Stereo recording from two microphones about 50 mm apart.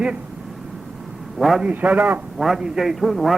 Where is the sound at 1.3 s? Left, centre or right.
Centre.